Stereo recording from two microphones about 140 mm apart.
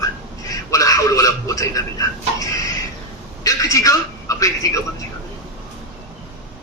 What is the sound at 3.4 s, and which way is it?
Television, 25° left (ahead or behind).